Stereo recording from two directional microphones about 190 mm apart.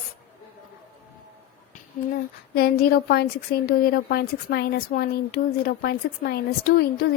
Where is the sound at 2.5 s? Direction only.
55° left (ahead or behind).